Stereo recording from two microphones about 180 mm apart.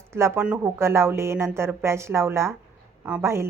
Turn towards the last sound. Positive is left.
turn(degrees=-15)  # may be behind; listen again after turning